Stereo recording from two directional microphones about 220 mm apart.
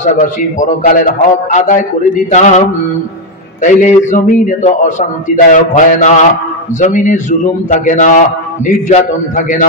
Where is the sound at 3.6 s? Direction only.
35° left (ahead or behind).